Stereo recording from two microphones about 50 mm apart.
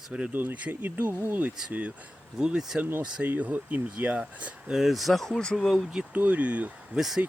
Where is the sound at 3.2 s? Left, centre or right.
Right.